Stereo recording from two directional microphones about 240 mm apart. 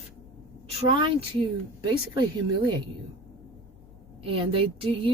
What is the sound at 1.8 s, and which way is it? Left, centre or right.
Speech, centre.